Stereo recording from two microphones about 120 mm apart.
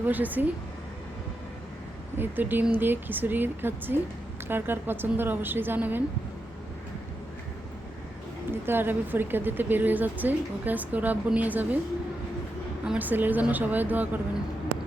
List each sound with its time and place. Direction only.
0.0 s speech: 15° right (ahead or behind)
2.1 s speech: 15° right (ahead or behind)
8.6 s speech: 20° right (ahead or behind)
12.8 s speech: 10° right (ahead or behind)